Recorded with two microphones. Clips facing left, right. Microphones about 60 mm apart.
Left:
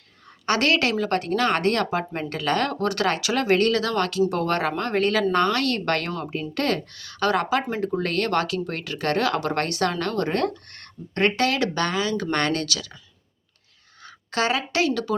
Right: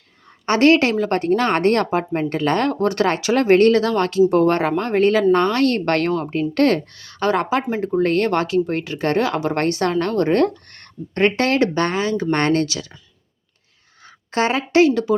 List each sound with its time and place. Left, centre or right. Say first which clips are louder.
0.4 s speech: right 7 dB; right
14.0 s a woman's voice: right 4 dB; right